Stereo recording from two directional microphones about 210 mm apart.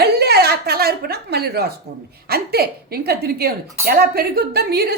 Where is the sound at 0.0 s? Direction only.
50° right (ahead or behind).